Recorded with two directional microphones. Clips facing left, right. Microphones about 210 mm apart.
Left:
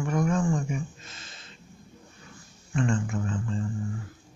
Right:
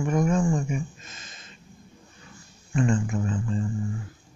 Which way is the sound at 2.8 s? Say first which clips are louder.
Right 3 dB; 15° right (ahead or behind).